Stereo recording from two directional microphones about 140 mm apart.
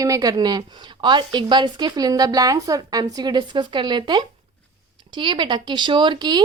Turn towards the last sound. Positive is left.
turn(degrees=-30)  # may be behind; listen again after turning